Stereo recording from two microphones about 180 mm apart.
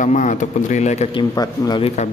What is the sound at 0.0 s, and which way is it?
Speech, 45° left (ahead or behind).